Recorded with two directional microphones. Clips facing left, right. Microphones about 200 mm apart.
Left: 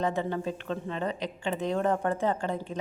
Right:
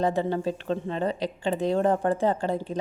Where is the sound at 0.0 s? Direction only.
35° right (ahead or behind).